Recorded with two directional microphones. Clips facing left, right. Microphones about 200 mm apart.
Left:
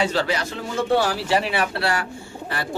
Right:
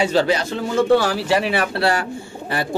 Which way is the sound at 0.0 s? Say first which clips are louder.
Right 5 dB; 20° right (ahead or behind).